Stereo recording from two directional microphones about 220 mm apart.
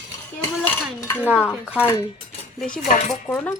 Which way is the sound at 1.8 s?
10° left (ahead or behind).